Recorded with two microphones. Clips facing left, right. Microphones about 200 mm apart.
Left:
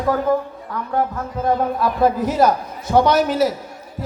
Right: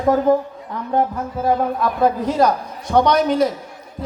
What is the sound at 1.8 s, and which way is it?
A man's voice, 5° left (ahead or behind).